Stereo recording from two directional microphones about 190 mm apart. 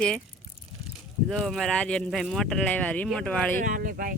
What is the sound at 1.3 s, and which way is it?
A man's voice, centre (ahead or behind).